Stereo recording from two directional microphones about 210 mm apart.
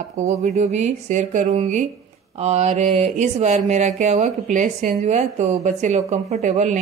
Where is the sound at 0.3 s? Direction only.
30° right (ahead or behind).